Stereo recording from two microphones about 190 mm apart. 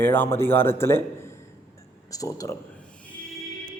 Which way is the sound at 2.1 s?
20° left (ahead or behind).